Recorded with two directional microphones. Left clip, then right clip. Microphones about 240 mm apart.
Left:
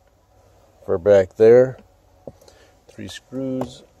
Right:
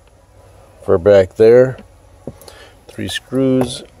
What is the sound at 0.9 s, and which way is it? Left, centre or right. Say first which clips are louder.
Speech: right 5 dB; centre.